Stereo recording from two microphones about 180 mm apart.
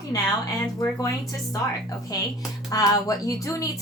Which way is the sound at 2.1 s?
20° left (ahead or behind).